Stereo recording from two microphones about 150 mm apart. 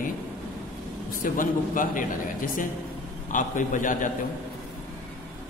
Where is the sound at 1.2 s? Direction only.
65° left (ahead or behind).